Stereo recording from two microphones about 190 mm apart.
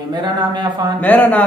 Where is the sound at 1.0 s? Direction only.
10° left (ahead or behind).